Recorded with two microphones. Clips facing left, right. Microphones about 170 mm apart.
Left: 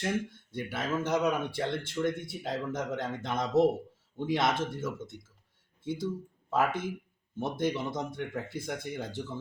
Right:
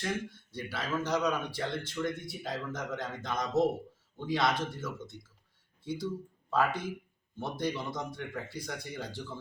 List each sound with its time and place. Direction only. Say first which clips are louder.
0.0 s speech: left 3 dB; 20° left (ahead or behind)